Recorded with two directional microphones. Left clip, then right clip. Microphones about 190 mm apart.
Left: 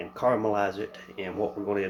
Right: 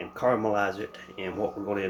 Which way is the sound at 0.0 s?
15° left (ahead or behind).